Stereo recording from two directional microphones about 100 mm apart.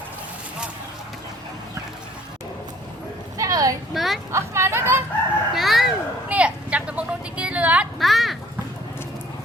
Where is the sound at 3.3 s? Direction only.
35° right (ahead or behind).